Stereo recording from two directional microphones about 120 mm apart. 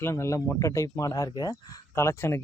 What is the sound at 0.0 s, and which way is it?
Speech, 25° left (ahead or behind).